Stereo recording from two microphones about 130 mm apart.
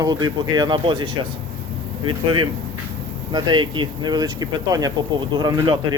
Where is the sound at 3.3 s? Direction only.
35° right (ahead or behind).